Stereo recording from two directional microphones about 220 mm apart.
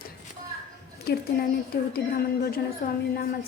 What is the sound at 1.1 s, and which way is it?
Speech, 50° left (ahead or behind).